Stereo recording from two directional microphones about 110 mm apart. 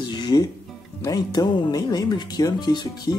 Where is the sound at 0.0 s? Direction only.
40° left (ahead or behind).